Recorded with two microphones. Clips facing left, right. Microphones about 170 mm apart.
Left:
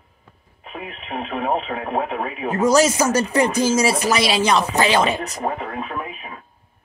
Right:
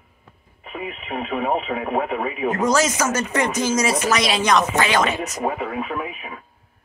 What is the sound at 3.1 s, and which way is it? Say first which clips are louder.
Speech: left 4 dB; 35° left (ahead or behind).